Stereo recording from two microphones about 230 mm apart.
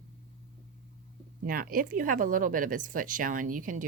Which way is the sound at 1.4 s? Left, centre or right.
Right.